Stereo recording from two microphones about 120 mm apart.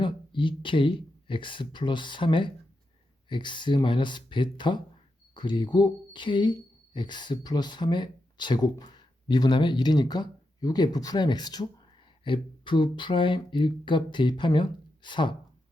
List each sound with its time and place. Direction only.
0.0 s speech: 45° left (ahead or behind)